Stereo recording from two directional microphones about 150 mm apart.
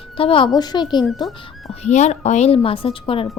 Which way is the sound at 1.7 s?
50° left (ahead or behind).